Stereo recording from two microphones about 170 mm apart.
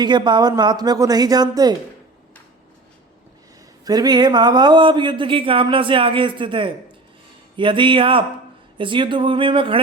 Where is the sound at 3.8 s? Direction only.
25° right (ahead or behind).